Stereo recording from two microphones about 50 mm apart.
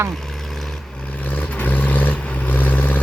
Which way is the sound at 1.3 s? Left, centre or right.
Left.